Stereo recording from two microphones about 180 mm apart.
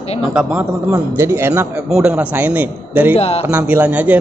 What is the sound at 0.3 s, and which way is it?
A man's voice, 5° right (ahead or behind).